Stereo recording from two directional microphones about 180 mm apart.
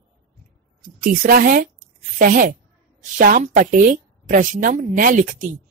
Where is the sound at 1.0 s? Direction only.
50° right (ahead or behind).